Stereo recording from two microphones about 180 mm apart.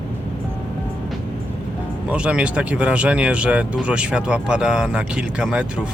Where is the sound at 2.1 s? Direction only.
5° right (ahead or behind).